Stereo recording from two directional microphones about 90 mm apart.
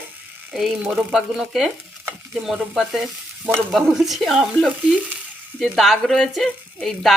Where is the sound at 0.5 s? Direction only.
Centre (ahead or behind).